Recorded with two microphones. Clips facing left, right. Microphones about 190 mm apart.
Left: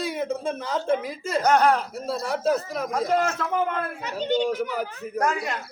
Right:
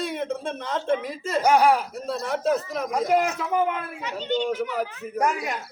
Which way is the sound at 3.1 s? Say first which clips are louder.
Right 2 dB; 15° right (ahead or behind).